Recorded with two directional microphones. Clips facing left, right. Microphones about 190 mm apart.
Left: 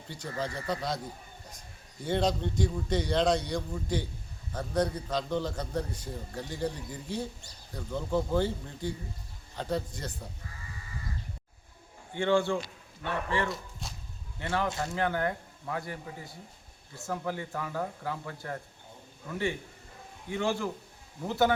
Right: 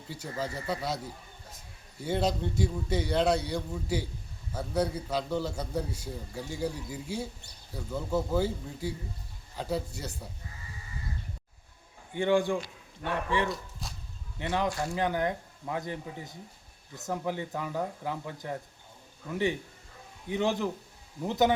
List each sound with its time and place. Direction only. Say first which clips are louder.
0.1 s a man's voice: even; 5° right (ahead or behind)
2.0 s a man's voice: left 1 dB; 5° right (ahead or behind)
12.1 s a man's voice: right 1 dB; 15° right (ahead or behind)
13.5 s whip: right 1 dB; centre (ahead or behind)
14.3 s a man's voice: right 1 dB; 15° right (ahead or behind)